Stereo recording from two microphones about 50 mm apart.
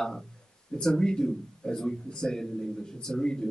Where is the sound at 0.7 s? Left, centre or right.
Centre.